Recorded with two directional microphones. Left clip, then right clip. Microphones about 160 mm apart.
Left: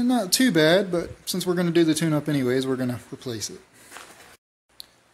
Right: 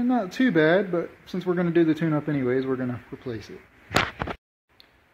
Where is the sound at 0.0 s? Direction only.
20° left (ahead or behind).